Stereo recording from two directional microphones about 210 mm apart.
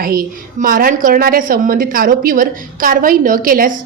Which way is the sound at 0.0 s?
45° right (ahead or behind).